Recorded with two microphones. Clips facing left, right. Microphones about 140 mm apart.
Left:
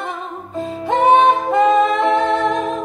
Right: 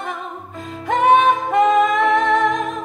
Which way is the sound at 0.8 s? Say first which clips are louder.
Left 2 dB; 30° left (ahead or behind).